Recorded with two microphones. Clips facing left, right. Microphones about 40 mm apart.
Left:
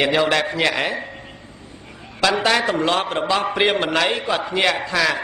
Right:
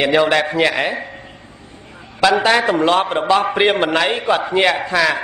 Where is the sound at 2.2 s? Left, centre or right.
Centre.